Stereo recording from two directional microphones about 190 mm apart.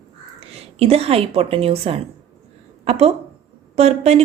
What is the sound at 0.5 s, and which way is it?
A woman's voice, 30° right (ahead or behind).